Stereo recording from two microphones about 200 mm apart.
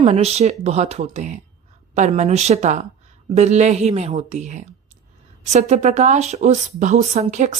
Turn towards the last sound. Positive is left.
turn(degrees=-35)  # may be behind; listen again after turning